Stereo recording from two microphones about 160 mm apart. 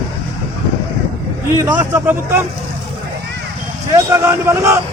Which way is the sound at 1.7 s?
10° right (ahead or behind).